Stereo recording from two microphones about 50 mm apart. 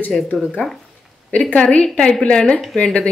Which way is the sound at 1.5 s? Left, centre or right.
Left.